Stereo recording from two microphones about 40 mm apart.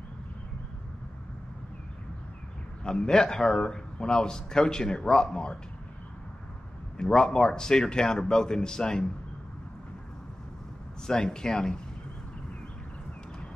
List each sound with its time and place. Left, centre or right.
2.8 s speech: centre
7.0 s speech: centre
11.1 s speech: centre